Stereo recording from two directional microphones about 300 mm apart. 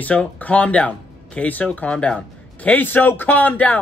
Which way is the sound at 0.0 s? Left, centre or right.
Centre.